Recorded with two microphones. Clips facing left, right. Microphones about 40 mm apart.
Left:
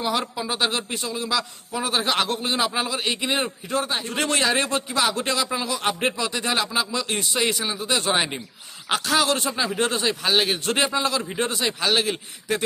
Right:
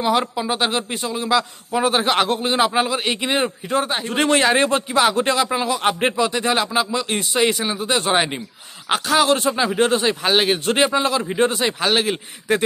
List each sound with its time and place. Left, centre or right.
0.0 s speech: right